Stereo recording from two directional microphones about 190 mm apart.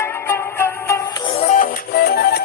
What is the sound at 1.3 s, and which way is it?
Music, 40° left (ahead or behind).